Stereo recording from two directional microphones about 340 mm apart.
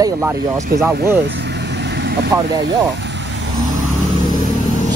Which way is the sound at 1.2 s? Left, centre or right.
Right.